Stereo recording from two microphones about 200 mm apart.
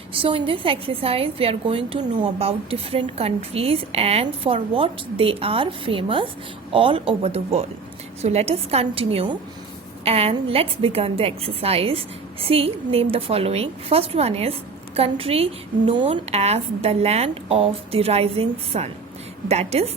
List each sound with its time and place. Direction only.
0.1 s a woman's voice: 25° right (ahead or behind)